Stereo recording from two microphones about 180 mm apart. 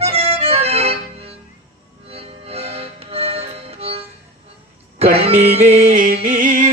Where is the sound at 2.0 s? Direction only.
35° right (ahead or behind).